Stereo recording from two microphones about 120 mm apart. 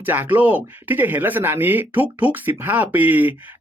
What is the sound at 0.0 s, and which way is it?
Speech, 15° right (ahead or behind).